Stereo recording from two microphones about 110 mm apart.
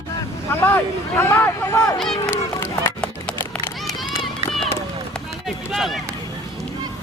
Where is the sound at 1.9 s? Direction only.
5° left (ahead or behind).